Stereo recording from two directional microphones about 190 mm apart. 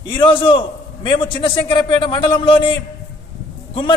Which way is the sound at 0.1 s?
25° left (ahead or behind).